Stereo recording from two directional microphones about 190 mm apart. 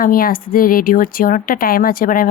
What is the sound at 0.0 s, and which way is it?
A woman's voice, 50° left (ahead or behind).